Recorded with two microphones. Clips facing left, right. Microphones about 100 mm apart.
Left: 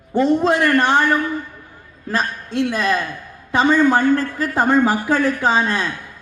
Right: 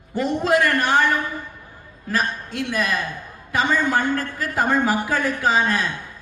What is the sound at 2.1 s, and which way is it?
Speech, 25° left (ahead or behind).